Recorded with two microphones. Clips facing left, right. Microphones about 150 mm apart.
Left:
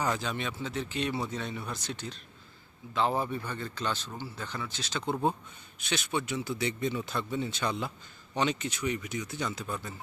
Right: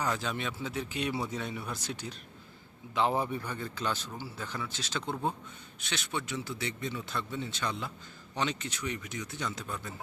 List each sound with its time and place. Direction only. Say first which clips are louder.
0.2 s speech: left 1 dB; centre (ahead or behind)
5.8 s speech: left 4 dB; 15° left (ahead or behind)